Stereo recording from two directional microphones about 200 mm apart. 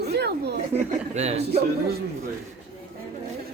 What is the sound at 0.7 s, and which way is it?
Speech, 35° right (ahead or behind).